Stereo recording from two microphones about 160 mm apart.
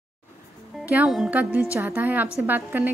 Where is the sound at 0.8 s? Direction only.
5° right (ahead or behind).